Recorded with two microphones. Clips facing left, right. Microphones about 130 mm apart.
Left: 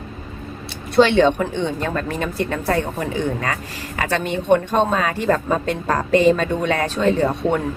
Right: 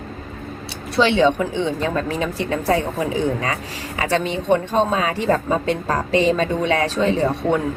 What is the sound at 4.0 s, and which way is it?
Speech, 55° left (ahead or behind).